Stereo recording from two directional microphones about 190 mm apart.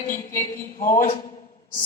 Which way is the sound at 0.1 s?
45° left (ahead or behind).